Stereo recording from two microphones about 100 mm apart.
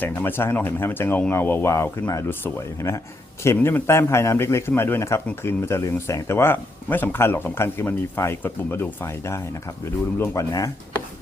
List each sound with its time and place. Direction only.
0.0 s speech: 20° left (ahead or behind)